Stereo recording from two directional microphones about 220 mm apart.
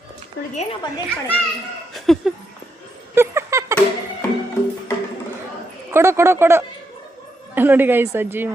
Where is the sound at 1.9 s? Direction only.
Centre (ahead or behind).